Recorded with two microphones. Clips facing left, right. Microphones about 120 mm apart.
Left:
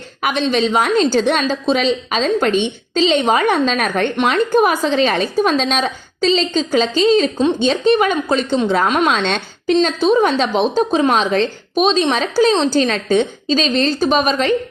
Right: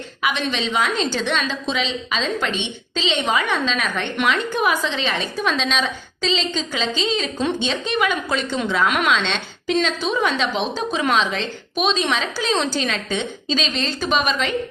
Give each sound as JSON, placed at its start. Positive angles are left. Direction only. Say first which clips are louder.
{"t": 0.2, "sound": "a woman's voice", "louder": "left 7 dB", "side_deg": 45}
{"t": 9.0, "sound": "a woman's voice", "louder": "left 4 dB", "side_deg": 45}